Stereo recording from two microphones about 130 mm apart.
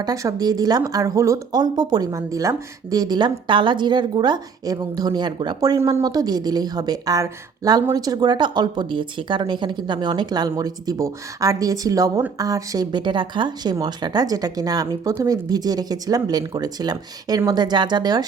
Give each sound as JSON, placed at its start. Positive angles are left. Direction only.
{"t": 0.0, "sound": "speech", "side_deg": -25}